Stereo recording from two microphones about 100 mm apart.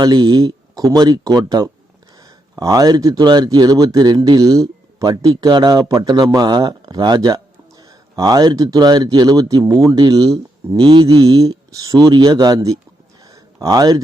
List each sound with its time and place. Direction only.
0.0 s speech: 40° right (ahead or behind)
10.8 s mantra: 55° right (ahead or behind)
11.0 s speech: 40° right (ahead or behind)
13.2 s a sound: 40° right (ahead or behind)